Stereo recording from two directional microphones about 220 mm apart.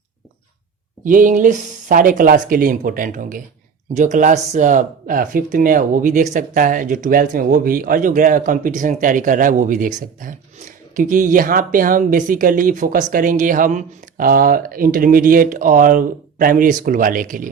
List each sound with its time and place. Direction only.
1.0 s speech: 35° right (ahead or behind)